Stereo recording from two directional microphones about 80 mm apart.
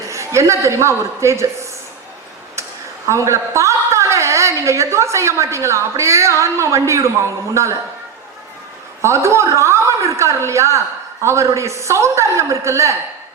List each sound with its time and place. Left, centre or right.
0.1 s a man's voice: right
3.1 s a sound: right
4.6 s a woman's voice: right
9.0 s a woman's voice: right